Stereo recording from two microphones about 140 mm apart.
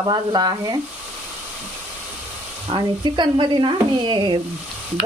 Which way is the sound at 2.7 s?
30° right (ahead or behind).